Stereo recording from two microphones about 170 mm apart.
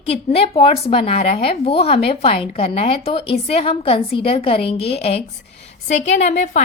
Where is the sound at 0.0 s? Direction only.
35° left (ahead or behind).